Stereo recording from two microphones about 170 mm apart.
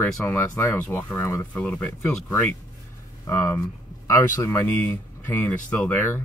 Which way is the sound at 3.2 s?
15° left (ahead or behind).